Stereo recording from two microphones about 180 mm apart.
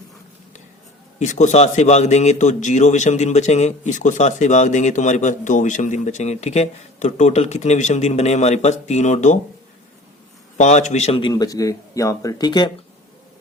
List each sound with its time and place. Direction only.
1.2 s a man's voice: 40° left (ahead or behind)
10.6 s a man's voice: 40° left (ahead or behind); by 12.7 s 25° left (ahead or behind)